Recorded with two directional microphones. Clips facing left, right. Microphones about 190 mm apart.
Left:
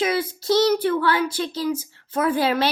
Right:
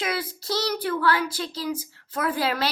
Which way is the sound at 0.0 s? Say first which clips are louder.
Left 6 dB; 25° left (ahead or behind).